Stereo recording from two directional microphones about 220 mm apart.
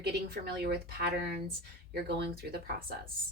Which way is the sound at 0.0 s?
45° right (ahead or behind).